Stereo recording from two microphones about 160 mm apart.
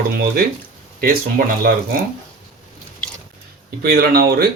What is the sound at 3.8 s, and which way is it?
Speech, 70° right (ahead or behind).